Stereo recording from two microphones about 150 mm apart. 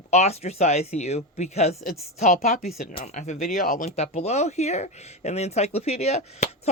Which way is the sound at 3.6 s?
65° left (ahead or behind).